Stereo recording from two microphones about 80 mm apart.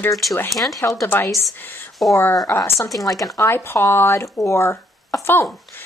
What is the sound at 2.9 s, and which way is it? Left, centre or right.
Speech, centre.